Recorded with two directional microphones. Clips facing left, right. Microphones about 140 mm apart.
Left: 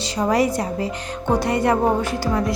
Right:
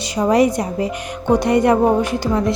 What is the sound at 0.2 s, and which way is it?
A woman's voice, 20° right (ahead or behind).